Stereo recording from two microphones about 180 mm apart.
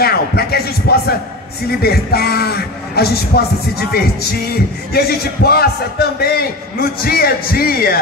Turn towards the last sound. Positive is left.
turn(degrees=55)  # may be behind; listen again after turning